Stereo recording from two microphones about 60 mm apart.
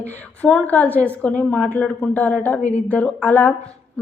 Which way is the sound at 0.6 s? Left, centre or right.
Left.